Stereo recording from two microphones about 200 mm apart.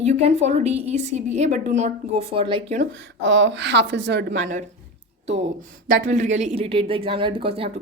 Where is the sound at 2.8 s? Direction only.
65° right (ahead or behind).